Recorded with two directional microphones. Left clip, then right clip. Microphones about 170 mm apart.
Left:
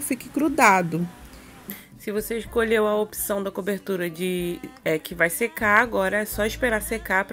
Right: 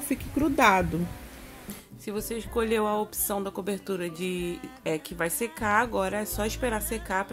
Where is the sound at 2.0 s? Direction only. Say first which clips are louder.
Left 6 dB; 15° left (ahead or behind).